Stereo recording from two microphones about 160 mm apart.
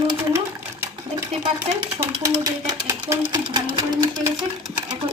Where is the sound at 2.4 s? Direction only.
20° right (ahead or behind).